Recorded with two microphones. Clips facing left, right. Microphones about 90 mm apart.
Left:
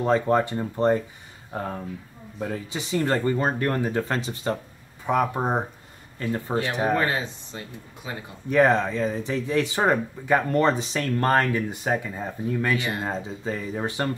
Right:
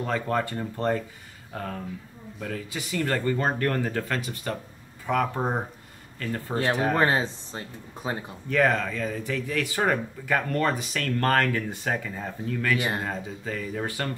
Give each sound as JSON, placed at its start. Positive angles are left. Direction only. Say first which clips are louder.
{"t": 0.0, "sound": "speech", "louder": "left 6 dB", "side_deg": 20}
{"t": 7.0, "sound": "speech", "louder": "right 2 dB", "side_deg": -30}
{"t": 8.5, "sound": "speech", "louder": "left 4 dB", "side_deg": 25}